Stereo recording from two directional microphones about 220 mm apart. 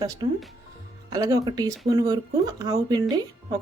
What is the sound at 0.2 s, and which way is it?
Speech, 15° right (ahead or behind).